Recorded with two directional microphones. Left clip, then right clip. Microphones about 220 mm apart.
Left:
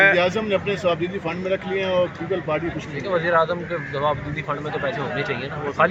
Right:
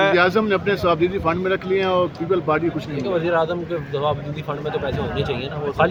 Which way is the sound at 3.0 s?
20° right (ahead or behind).